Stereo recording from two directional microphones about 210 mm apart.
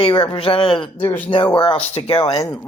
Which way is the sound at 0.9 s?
10° left (ahead or behind).